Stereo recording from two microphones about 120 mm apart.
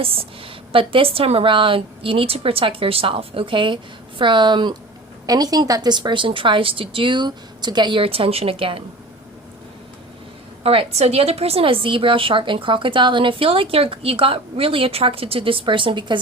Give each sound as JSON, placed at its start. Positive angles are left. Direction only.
{"t": 0.0, "sound": "a woman's voice", "side_deg": -50}
{"t": 10.6, "sound": "a woman's voice", "side_deg": -55}